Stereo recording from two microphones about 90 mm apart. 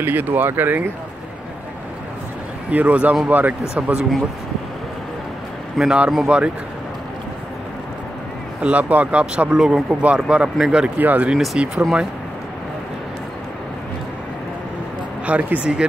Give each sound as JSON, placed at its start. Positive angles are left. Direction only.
{"t": 0.0, "sound": "speech", "side_deg": -20}
{"t": 2.7, "sound": "speech", "side_deg": -15}
{"t": 5.8, "sound": "speech", "side_deg": -5}
{"t": 8.5, "sound": "speech", "side_deg": -15}
{"t": 11.3, "sound": "speech", "side_deg": -5}
{"t": 15.2, "sound": "speech", "side_deg": -15}